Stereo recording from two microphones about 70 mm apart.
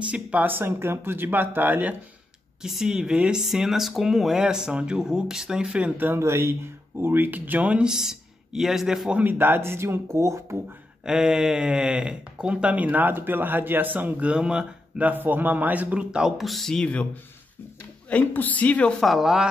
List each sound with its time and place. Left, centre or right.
0.1 s speech: right
2.6 s speech: centre
6.0 s speech: right; by 9.1 s centre
9.1 s speech: right
11.1 s speech: centre
15.0 s speech: right; by 17.1 s centre
18.1 s a man's voice: left
18.9 s speech: centre